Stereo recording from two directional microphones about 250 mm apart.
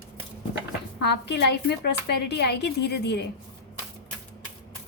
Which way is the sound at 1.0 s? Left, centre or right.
Left.